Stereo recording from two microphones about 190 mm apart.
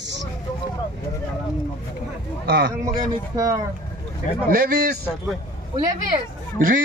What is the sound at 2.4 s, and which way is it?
Speech, 60° right (ahead or behind).